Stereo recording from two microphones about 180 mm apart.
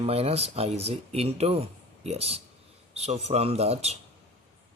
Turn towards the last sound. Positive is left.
turn(degrees=-35)  # may be behind; listen again after turning